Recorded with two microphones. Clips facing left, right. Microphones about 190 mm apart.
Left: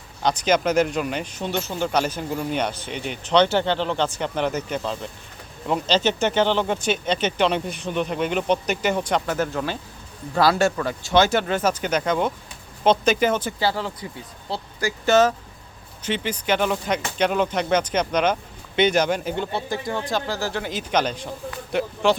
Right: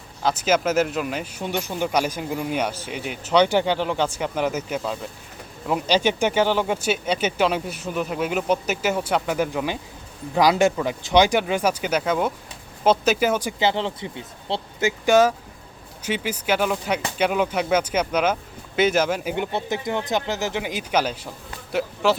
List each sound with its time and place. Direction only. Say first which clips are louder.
0.2 s speech: even; 5° right (ahead or behind)
13.6 s speech: right 2 dB; 20° right (ahead or behind)
19.5 s speech: right 1 dB; 20° right (ahead or behind); by 22.1 s 5° right (ahead or behind)